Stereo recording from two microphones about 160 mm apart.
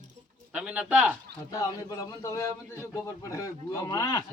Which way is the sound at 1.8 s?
20° left (ahead or behind).